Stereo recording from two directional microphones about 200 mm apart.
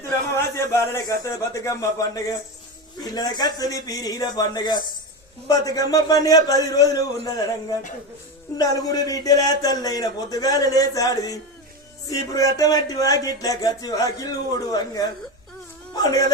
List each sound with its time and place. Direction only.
0.0 s speech: 15° left (ahead or behind)